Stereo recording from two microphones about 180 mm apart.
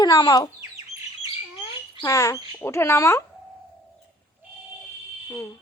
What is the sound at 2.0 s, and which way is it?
Speech, 20° left (ahead or behind).